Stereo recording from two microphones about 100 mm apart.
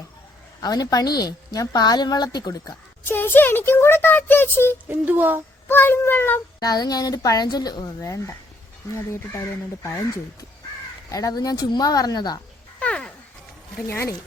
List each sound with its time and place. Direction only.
0.6 s a woman's voice: 40° left (ahead or behind)
3.0 s speech: 20° left (ahead or behind)
4.9 s speech: 20° right (ahead or behind)
5.6 s speech: 20° left (ahead or behind)
6.6 s a woman's voice: 40° left (ahead or behind)
8.0 s a woman's voice: 30° left (ahead or behind)
11.1 s a woman's voice: 35° left (ahead or behind)
12.8 s a sound: 10° left (ahead or behind)